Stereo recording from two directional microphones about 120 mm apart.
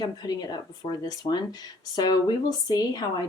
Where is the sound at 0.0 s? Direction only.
35° left (ahead or behind).